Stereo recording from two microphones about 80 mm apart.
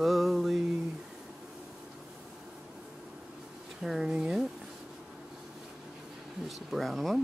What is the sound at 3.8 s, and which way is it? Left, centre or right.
Speech, centre.